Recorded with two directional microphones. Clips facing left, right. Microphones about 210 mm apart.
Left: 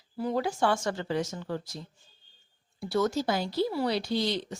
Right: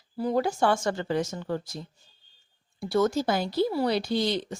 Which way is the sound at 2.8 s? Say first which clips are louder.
Right 3 dB; 50° right (ahead or behind).